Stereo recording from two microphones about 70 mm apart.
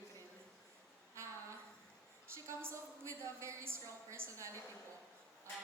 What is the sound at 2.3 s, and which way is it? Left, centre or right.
A woman's voice, right.